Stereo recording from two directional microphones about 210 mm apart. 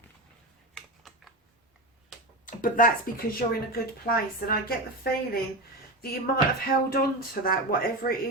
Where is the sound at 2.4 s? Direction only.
40° left (ahead or behind).